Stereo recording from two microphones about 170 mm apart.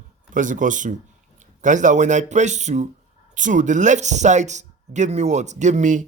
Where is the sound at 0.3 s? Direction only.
50° right (ahead or behind).